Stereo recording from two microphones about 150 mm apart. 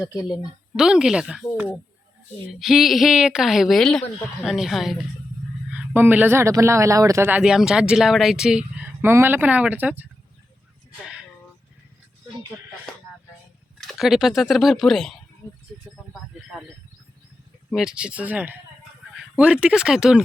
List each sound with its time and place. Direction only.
0.0 s a woman's voice: 25° left (ahead or behind)
0.8 s a woman's voice: 5° right (ahead or behind)
5.7 s speech: 15° right (ahead or behind)
13.8 s a woman's voice: centre (ahead or behind)
17.7 s speech: 5° right (ahead or behind)